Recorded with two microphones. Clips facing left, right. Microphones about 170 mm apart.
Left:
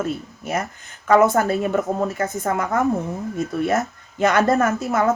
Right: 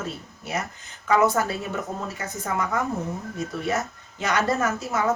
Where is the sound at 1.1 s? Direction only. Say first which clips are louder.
Left 5 dB; 55° left (ahead or behind).